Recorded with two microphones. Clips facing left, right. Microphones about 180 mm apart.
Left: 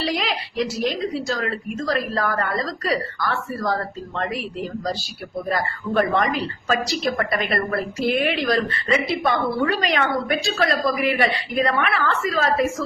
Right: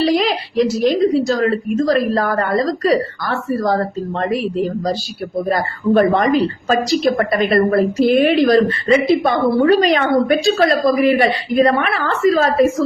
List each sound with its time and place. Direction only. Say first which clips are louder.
0.0 s a sound: right 9 dB; 40° right (ahead or behind)
1.3 s a woman's voice: right 9 dB; 40° right (ahead or behind)
5.5 s a woman's voice: right 8 dB; 40° right (ahead or behind)